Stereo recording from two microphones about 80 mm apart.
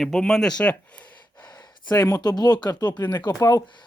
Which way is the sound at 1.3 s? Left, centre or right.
Left.